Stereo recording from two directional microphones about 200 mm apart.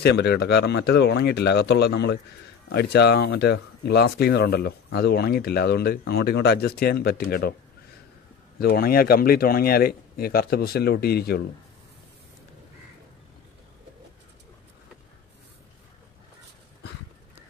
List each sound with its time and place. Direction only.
0.0 s speech: 55° left (ahead or behind)
8.5 s speech: 50° left (ahead or behind)